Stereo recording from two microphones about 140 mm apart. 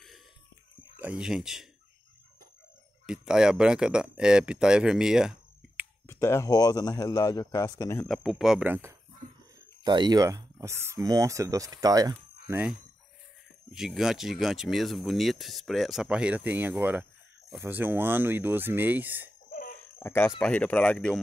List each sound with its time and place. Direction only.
0.9 s speech: 10° right (ahead or behind)
3.1 s speech: 5° right (ahead or behind)
6.0 s speech: 20° left (ahead or behind)
8.0 s speech: centre (ahead or behind); by 8.9 s 15° right (ahead or behind)
9.8 s speech: 30° right (ahead or behind)
12.5 s speech: 5° right (ahead or behind)
19.5 s laughter: 90° left
20.0 s speech: 20° left (ahead or behind)